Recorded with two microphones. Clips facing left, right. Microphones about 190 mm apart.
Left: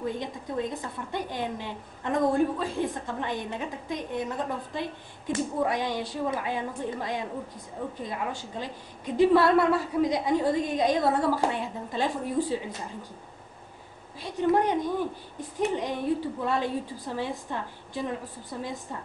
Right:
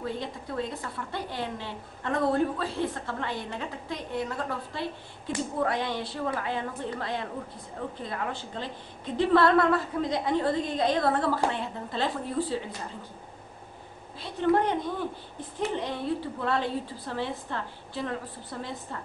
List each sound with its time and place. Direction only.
0.0 s a woman's voice: 15° left (ahead or behind)
14.2 s a woman's voice: 15° left (ahead or behind)